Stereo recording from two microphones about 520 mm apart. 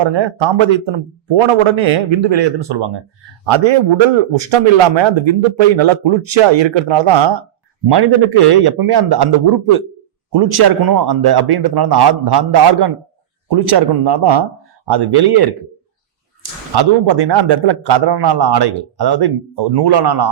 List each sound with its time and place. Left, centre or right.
0.0 s a man's voice: right
3.4 s a man's voice: right
10.3 s speech: right